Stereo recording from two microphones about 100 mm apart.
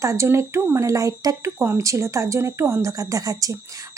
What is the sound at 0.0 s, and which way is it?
Speech, 30° right (ahead or behind).